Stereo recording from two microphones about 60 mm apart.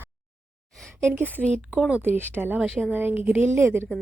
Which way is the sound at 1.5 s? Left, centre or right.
Centre.